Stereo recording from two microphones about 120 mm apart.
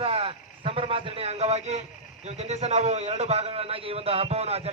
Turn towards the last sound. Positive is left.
turn(degrees=-60)  # may be behind; listen again after turning